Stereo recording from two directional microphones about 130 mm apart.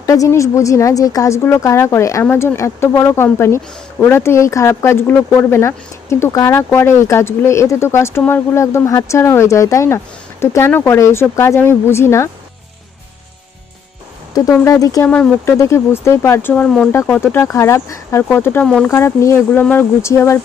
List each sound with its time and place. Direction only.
0.0 s speech: 25° left (ahead or behind)
14.6 s speech: 25° left (ahead or behind)
15.0 s speech: 10° left (ahead or behind)
15.5 s speech: 20° left (ahead or behind)
16.6 s speech: 5° left (ahead or behind)
17.3 s speech: 20° left (ahead or behind)